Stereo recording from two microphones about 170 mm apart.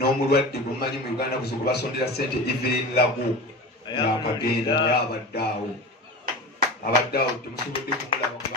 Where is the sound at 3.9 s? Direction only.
25° left (ahead or behind).